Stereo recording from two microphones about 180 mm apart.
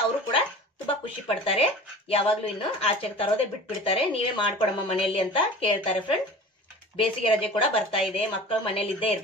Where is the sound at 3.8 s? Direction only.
30° left (ahead or behind).